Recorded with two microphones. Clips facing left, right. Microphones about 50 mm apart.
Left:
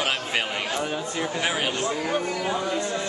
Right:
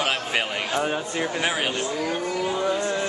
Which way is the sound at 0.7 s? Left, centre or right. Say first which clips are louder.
Right 3 dB; right.